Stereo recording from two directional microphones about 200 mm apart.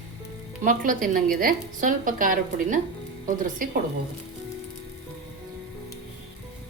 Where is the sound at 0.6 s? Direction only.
40° right (ahead or behind).